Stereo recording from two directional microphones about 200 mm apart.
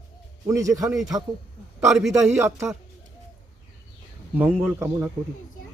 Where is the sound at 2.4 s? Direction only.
15° right (ahead or behind).